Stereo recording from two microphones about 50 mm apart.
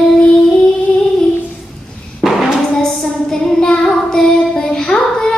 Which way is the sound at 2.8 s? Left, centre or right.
Centre.